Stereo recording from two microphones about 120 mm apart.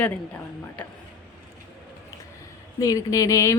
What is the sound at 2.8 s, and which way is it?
Speech, 30° left (ahead or behind).